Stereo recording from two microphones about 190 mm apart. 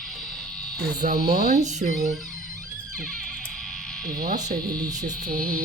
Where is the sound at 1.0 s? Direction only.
45° right (ahead or behind).